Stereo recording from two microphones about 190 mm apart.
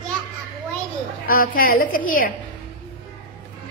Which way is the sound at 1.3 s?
50° left (ahead or behind).